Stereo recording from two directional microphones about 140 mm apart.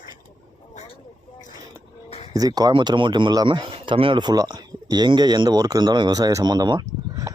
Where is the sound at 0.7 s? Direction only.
40° left (ahead or behind).